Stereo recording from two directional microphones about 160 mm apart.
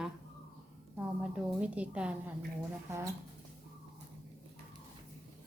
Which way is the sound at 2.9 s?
20° right (ahead or behind).